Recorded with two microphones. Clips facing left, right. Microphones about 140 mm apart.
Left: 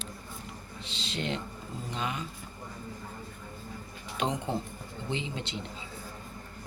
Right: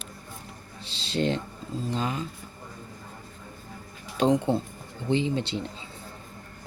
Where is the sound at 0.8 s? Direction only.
35° right (ahead or behind).